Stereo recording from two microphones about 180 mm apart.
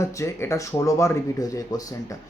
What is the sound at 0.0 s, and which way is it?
Speech, 15° left (ahead or behind).